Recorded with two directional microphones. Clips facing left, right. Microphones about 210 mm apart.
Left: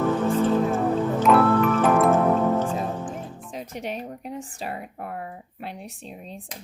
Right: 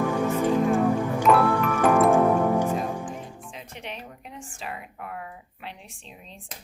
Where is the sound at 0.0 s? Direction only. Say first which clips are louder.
Left 2 dB; 15° right (ahead or behind).